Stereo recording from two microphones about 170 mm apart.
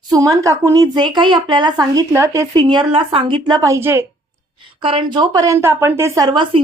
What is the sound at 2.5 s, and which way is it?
A woman's voice, 25° right (ahead or behind).